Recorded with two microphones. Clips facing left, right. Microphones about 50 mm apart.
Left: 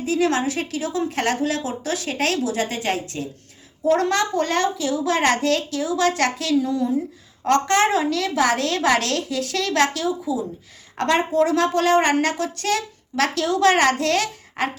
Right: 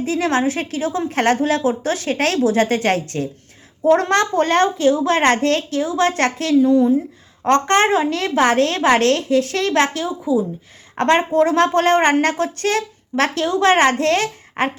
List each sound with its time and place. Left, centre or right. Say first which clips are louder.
0.0 s a woman's voice: right 2 dB; right
3.8 s a woman's voice: right 4 dB; right